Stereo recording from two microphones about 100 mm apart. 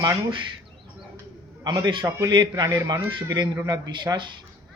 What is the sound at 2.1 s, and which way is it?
A man's voice, 40° right (ahead or behind).